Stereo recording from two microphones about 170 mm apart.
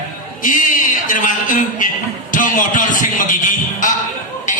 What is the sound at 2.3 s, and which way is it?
Music, 50° left (ahead or behind).